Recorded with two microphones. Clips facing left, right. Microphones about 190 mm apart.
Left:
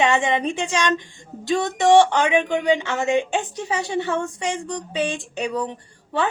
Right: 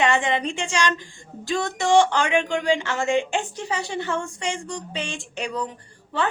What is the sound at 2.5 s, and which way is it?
Speech, 20° left (ahead or behind).